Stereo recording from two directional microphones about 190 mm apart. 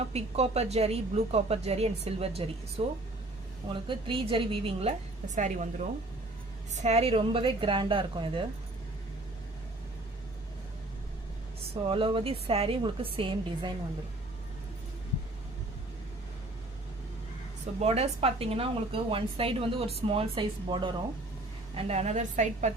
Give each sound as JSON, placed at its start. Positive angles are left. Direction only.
{"t": 0.1, "sound": "a woman's voice", "side_deg": -35}
{"t": 6.7, "sound": "a woman's voice", "side_deg": -35}
{"t": 11.9, "sound": "a woman's voice", "side_deg": -25}
{"t": 17.7, "sound": "a woman's voice", "side_deg": -35}
{"t": 21.8, "sound": "a woman's voice", "side_deg": -35}